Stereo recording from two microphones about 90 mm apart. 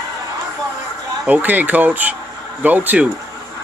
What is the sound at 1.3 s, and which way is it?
Speech, 20° right (ahead or behind).